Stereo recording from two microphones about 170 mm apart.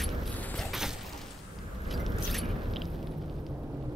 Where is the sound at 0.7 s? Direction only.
Centre (ahead or behind).